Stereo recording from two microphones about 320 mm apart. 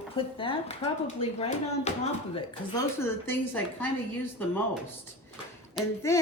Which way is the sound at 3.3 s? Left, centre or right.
Centre.